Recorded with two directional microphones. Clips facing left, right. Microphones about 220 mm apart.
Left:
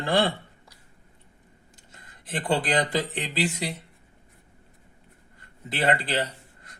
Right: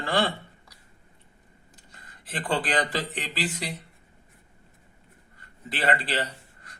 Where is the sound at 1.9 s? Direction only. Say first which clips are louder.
Left 4 dB; 25° left (ahead or behind).